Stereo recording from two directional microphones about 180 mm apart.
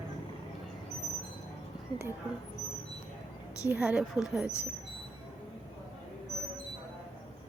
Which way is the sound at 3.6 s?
5° right (ahead or behind).